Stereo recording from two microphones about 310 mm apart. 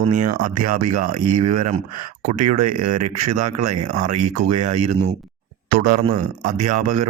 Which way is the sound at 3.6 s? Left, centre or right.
Right.